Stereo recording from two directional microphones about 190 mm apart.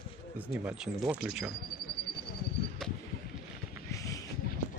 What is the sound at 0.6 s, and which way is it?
Speech, 5° right (ahead or behind).